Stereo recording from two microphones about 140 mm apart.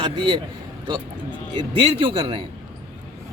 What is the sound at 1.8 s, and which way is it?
Speech, 35° right (ahead or behind).